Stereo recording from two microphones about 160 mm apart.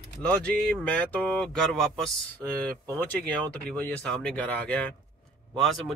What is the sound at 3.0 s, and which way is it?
Speech, 10° left (ahead or behind).